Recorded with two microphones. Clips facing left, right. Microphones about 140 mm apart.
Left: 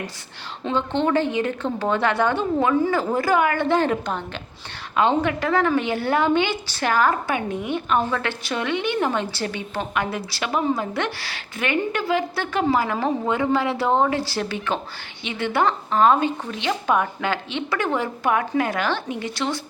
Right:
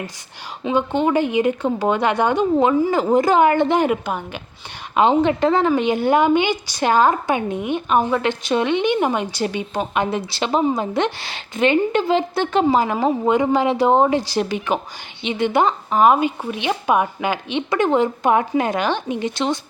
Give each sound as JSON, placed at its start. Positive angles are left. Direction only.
{"t": 0.6, "sound": "speech", "side_deg": -10}
{"t": 4.9, "sound": "a woman's voice", "side_deg": -20}